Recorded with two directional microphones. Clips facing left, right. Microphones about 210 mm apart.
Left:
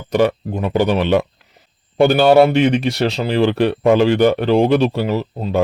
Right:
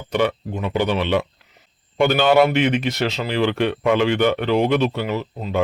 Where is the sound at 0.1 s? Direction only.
40° left (ahead or behind).